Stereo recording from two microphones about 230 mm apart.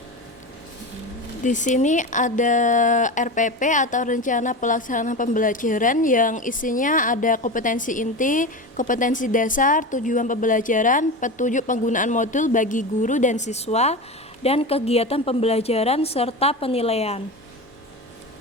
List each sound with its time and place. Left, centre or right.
1.5 s a woman's voice: left